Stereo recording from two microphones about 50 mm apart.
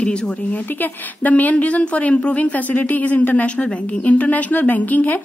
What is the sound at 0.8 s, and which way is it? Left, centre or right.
A woman's voice, left.